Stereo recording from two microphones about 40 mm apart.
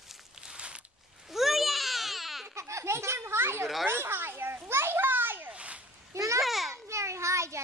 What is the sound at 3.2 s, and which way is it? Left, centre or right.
Children playing, right.